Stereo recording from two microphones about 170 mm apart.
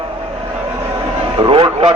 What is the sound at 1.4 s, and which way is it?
Speech, 30° right (ahead or behind).